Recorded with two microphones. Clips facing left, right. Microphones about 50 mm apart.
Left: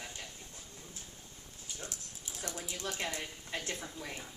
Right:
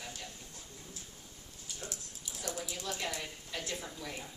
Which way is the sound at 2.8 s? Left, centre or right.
Left.